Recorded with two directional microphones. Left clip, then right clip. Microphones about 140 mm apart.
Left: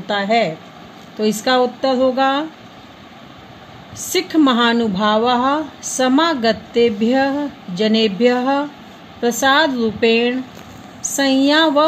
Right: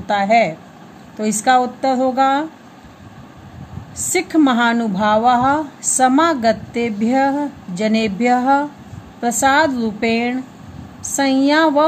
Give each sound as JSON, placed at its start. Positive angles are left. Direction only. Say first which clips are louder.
{"t": 0.0, "sound": "speech", "louder": "right 2 dB", "side_deg": 40}
{"t": 4.1, "sound": "speech", "louder": "even", "side_deg": 45}